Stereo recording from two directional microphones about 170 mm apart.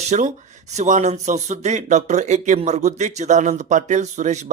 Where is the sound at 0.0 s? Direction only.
45° right (ahead or behind).